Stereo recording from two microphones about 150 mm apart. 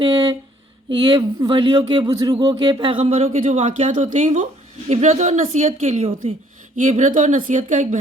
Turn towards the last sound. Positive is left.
turn(degrees=-55)  # may be behind; listen again after turning